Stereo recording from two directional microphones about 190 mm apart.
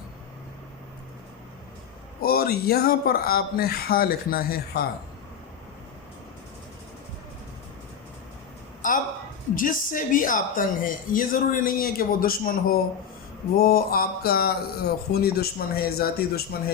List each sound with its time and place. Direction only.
2.2 s speech: 55° left (ahead or behind)
8.8 s a woman's voice: 45° left (ahead or behind)